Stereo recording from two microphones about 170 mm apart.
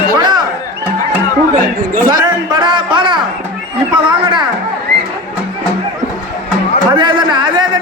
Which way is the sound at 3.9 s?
30° right (ahead or behind).